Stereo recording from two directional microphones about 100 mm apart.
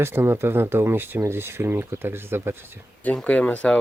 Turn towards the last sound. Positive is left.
turn(degrees=15)  # may be behind; listen again after turning